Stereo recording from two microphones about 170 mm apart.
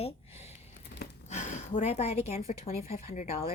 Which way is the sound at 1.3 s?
45° left (ahead or behind).